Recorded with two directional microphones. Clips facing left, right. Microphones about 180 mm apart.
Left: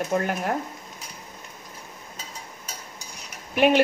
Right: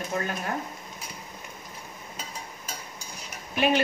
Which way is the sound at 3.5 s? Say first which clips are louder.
Left 5 dB; 60° left (ahead or behind).